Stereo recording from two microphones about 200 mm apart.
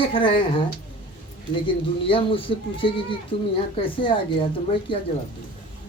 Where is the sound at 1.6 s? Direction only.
25° left (ahead or behind).